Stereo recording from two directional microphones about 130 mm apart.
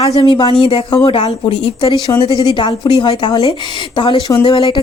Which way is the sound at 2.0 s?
35° left (ahead or behind).